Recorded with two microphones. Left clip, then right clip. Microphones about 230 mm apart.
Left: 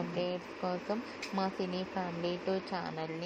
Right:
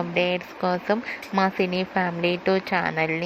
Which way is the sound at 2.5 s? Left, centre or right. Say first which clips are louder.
Right 14 dB; right.